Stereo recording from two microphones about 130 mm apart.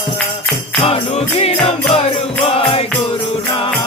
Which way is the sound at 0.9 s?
50° left (ahead or behind).